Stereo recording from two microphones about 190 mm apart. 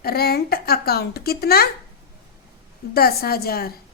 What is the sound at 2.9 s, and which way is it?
Speech, 55° left (ahead or behind).